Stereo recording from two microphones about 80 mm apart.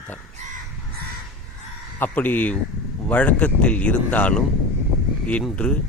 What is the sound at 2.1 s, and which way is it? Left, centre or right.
A man's voice, left.